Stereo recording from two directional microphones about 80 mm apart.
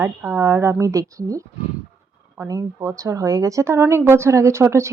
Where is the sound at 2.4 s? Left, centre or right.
Right.